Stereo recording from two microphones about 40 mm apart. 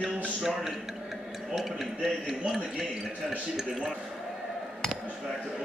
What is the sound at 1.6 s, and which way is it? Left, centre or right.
A man's voice, centre.